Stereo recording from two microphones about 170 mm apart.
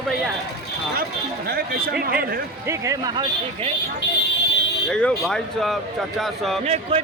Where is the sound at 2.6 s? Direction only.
15° right (ahead or behind).